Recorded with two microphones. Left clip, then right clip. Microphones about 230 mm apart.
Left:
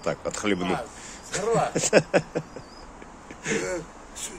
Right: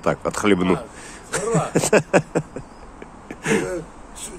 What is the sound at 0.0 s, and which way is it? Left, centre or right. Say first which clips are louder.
Speech: right 7 dB; right.